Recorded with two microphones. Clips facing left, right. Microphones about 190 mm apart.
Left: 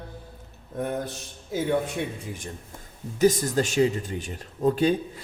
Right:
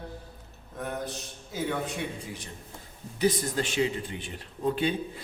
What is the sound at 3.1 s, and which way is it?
Speech, 45° left (ahead or behind).